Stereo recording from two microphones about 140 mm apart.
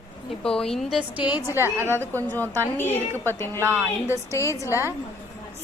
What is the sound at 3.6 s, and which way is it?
Speech, 15° right (ahead or behind).